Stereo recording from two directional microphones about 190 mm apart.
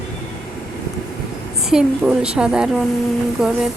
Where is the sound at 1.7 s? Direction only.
5° right (ahead or behind).